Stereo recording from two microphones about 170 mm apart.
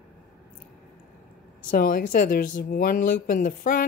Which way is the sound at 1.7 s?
55° left (ahead or behind).